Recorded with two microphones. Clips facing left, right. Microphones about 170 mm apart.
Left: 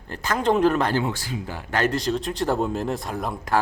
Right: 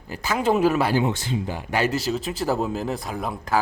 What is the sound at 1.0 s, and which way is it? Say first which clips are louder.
A man's voice: right 3 dB; 25° right (ahead or behind).